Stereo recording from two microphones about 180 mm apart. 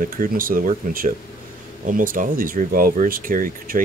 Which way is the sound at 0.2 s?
50° right (ahead or behind).